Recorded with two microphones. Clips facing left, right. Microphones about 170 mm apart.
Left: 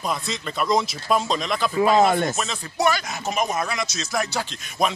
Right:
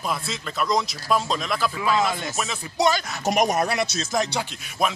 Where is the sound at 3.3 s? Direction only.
75° right (ahead or behind).